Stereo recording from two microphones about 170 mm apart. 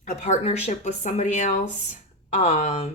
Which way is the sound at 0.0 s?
45° left (ahead or behind).